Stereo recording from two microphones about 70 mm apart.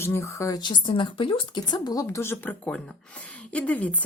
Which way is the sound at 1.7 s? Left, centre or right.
Left.